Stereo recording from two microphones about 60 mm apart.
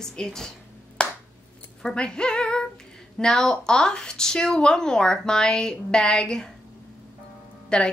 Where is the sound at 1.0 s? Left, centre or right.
Centre.